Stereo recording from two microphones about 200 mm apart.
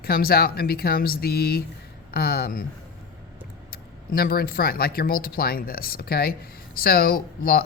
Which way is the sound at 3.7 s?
50° left (ahead or behind).